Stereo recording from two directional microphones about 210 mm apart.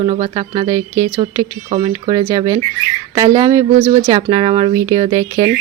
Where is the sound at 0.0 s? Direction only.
25° right (ahead or behind).